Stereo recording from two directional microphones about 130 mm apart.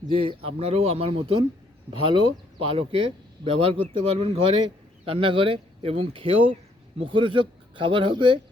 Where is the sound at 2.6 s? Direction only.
45° right (ahead or behind).